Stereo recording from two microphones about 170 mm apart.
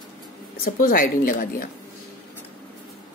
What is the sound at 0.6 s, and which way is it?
Speech, 55° left (ahead or behind).